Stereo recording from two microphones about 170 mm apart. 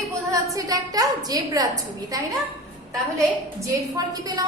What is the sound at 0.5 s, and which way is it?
A woman's voice, 20° right (ahead or behind).